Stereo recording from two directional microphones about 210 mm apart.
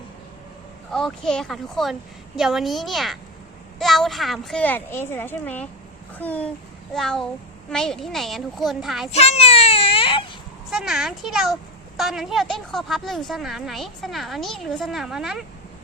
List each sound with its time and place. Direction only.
0.9 s a woman's voice: 5° left (ahead or behind)
9.0 s baby cry: 30° left (ahead or behind)
10.7 s a woman's voice: centre (ahead or behind)